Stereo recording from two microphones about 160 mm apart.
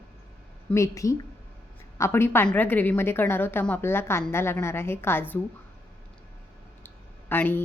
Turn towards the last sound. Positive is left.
turn(degrees=10)  # may be behind; listen again after turning